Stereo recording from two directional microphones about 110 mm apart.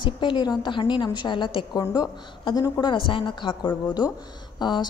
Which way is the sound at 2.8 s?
50° left (ahead or behind).